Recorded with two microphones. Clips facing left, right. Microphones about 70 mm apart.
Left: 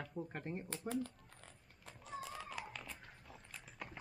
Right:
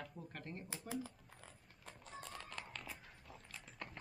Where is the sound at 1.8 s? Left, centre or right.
Centre.